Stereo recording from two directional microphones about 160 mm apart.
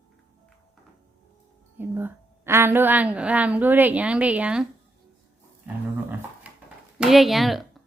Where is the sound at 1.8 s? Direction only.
15° right (ahead or behind).